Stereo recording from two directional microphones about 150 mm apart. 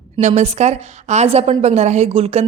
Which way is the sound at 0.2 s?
50° right (ahead or behind).